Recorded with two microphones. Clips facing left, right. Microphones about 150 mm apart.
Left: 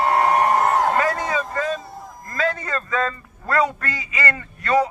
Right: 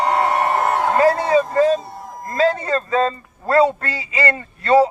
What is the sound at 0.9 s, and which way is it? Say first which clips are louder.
A man's voice: right 7 dB; 30° right (ahead or behind).